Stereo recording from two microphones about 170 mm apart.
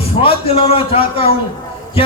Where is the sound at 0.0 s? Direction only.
35° left (ahead or behind).